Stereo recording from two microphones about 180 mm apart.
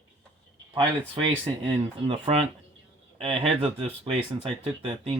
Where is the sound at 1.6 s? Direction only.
30° right (ahead or behind).